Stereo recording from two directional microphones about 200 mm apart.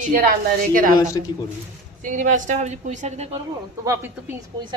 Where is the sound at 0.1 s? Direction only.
45° right (ahead or behind).